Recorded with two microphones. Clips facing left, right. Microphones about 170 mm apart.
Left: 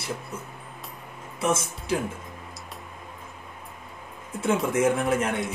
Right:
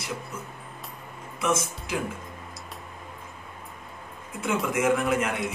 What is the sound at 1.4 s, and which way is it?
Speech, 30° left (ahead or behind).